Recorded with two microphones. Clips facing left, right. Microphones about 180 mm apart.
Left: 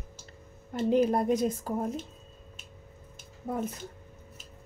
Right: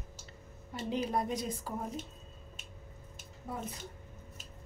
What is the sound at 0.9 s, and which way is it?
Speech, 50° left (ahead or behind).